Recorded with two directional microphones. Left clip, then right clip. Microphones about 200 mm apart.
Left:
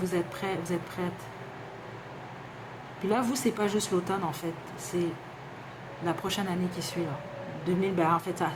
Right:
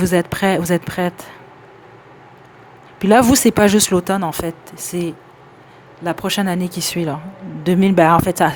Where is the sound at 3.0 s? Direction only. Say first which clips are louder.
Right 17 dB; 50° right (ahead or behind).